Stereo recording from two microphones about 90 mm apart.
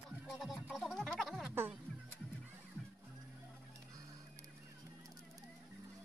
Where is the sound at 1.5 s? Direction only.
25° right (ahead or behind).